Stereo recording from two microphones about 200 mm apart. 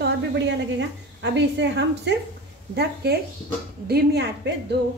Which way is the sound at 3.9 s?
55° right (ahead or behind).